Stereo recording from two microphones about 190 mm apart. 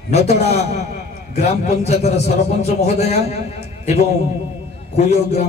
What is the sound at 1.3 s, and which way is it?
A man's voice, 35° left (ahead or behind).